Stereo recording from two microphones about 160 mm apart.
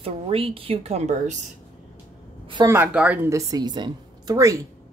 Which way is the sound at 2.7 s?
10° right (ahead or behind).